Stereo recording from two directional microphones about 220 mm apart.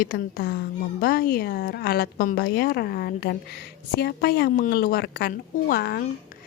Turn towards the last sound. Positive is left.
turn(degrees=45)  # may be behind; listen again after turning